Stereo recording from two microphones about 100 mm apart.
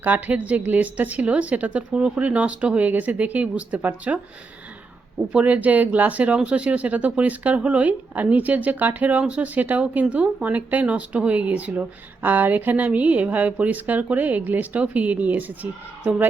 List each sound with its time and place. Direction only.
0.0 s speech: 15° right (ahead or behind)
5.3 s speech: 15° right (ahead or behind)